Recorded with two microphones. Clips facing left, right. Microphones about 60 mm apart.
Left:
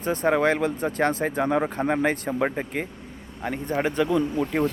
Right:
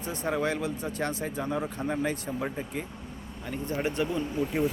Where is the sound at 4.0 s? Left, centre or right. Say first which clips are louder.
Left 6 dB; left.